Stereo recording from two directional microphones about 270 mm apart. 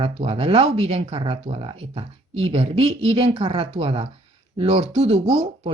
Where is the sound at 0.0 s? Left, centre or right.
Right.